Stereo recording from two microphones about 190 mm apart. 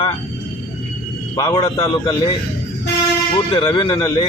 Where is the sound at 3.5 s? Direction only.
25° left (ahead or behind).